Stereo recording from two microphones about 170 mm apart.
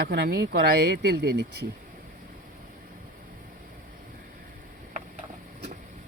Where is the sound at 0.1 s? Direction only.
70° right (ahead or behind).